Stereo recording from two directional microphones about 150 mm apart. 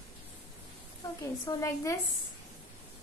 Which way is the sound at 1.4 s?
20° left (ahead or behind).